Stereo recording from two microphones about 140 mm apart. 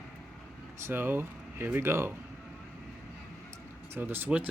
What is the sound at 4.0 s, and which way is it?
Speech, 15° right (ahead or behind).